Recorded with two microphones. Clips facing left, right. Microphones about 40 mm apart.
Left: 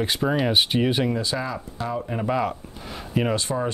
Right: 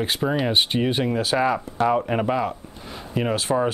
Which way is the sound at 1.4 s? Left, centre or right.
Right.